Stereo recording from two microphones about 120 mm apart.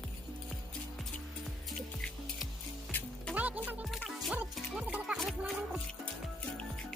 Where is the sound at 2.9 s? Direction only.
15° left (ahead or behind).